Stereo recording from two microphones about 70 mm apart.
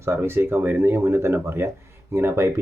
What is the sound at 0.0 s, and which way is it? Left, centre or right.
Speech, right.